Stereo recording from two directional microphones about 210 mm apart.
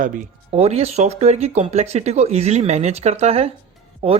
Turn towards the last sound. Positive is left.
turn(degrees=-30)  # may be behind; listen again after turning